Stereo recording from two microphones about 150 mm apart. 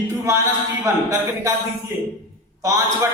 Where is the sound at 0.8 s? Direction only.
20° right (ahead or behind).